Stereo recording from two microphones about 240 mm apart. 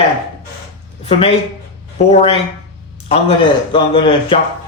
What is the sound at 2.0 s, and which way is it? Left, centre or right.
A man's voice, left.